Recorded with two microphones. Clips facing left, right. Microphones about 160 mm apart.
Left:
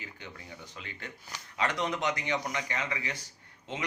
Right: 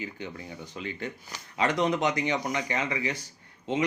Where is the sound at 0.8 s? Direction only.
20° right (ahead or behind).